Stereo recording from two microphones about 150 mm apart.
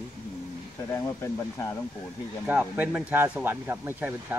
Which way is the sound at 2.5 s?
10° right (ahead or behind).